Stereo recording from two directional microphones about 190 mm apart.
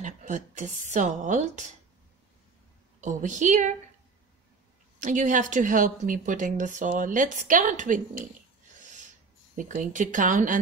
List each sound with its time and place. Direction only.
0.0 s a woman's voice: 40° right (ahead or behind)
3.0 s a woman's voice: 40° right (ahead or behind)
5.0 s a woman's voice: 40° right (ahead or behind)
9.6 s speech: 40° right (ahead or behind)